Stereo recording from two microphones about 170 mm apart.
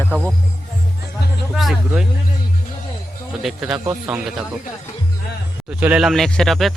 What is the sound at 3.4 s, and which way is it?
Speech, 5° right (ahead or behind).